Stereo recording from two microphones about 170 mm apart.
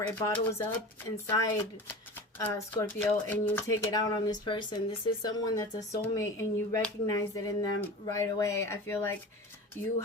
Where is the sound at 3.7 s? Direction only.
20° left (ahead or behind).